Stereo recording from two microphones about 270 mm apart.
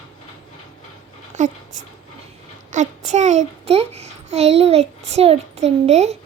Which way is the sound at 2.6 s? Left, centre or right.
Right.